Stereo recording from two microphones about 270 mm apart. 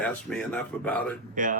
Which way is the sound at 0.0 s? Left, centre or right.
Centre.